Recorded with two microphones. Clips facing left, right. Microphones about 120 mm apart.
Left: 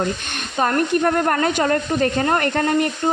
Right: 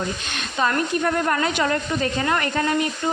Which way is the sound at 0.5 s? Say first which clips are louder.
Left 2 dB; 35° left (ahead or behind).